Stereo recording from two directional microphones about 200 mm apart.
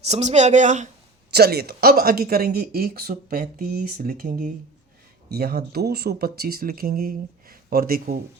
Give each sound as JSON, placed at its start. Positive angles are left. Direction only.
{"t": 0.0, "sound": "speech", "side_deg": -35}
{"t": 1.3, "sound": "speech", "side_deg": -50}